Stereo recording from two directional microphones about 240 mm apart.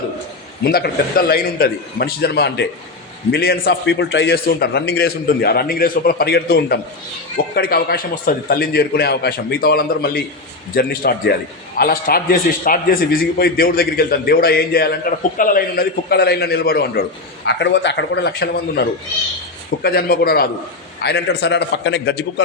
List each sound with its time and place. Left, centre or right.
0.6 s a man's voice: left